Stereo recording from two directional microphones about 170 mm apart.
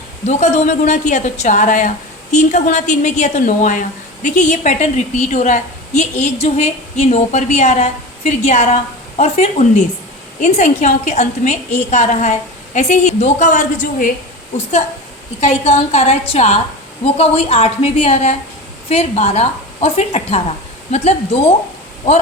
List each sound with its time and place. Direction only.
0.3 s a woman's voice: 40° left (ahead or behind)
15.4 s a woman's voice: 40° left (ahead or behind)